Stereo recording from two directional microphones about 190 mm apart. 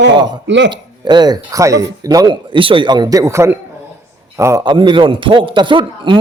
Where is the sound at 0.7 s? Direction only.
25° right (ahead or behind).